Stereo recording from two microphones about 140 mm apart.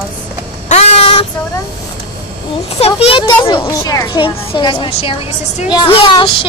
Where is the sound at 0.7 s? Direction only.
50° left (ahead or behind).